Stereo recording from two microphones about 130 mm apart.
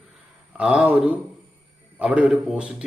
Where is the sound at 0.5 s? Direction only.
10° right (ahead or behind).